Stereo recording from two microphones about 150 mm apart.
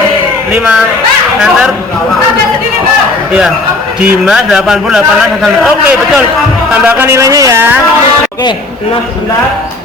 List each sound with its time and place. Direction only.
0.5 s a man's voice: 5° right (ahead or behind)
4.0 s a man's voice: 5° right (ahead or behind)